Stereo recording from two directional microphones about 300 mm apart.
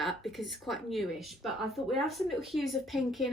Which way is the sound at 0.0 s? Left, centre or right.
Centre.